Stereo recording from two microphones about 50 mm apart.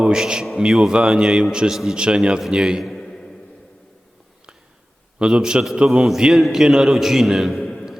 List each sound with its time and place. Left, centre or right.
0.0 s a man's voice: centre
2.0 s a man's voice: centre
2.9 s a sound: centre
5.2 s a man's voice: centre
6.1 s a man's voice: centre